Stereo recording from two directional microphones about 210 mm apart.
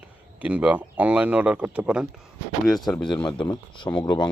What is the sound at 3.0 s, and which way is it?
Speech, 20° left (ahead or behind).